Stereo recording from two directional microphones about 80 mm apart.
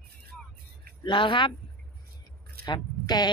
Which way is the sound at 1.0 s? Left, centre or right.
Left.